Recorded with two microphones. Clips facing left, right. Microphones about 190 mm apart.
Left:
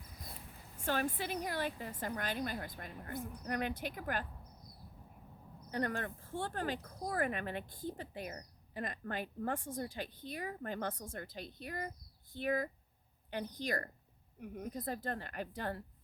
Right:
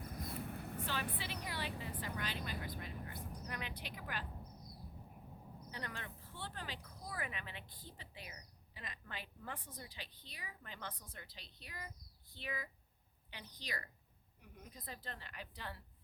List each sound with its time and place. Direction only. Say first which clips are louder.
0.0 s vehicle: right 8 dB; 55° right (ahead or behind)
1.2 s speech: left 7 dB; 50° left (ahead or behind)
5.7 s speech: left 12 dB; 50° left (ahead or behind)